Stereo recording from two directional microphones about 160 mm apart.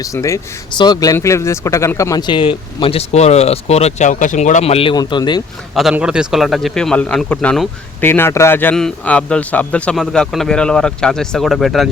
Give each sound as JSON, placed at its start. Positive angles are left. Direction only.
{"t": 0.0, "sound": "speech", "side_deg": 20}
{"t": 5.7, "sound": "speech", "side_deg": -5}